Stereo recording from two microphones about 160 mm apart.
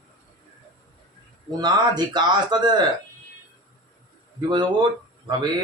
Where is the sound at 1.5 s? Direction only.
25° right (ahead or behind).